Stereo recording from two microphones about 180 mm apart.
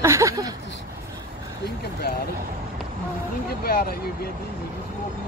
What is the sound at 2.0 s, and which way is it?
Vehicle, 60° left (ahead or behind).